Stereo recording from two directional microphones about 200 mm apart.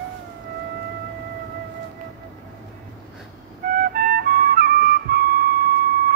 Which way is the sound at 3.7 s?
45° right (ahead or behind).